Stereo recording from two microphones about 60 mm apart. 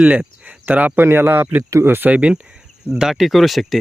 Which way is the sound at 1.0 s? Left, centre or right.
Right.